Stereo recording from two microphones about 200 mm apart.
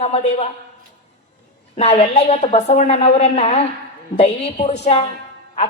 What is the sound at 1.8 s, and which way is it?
A woman's voice, 30° left (ahead or behind).